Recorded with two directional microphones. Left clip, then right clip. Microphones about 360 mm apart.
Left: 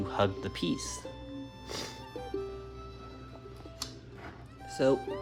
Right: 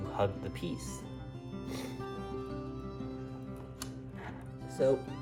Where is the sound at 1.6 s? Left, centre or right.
Left.